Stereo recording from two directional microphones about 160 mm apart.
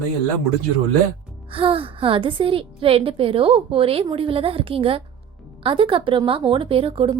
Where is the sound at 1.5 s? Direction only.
35° right (ahead or behind).